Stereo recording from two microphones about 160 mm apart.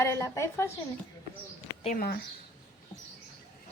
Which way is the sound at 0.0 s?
15° left (ahead or behind).